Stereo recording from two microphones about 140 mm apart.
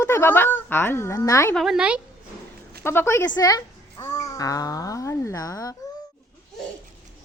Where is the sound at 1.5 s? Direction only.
Centre (ahead or behind).